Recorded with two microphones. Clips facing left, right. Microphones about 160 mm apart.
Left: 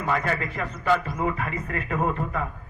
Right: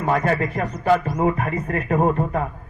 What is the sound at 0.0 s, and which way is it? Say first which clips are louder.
Music: right 6 dB; 45° right (ahead or behind).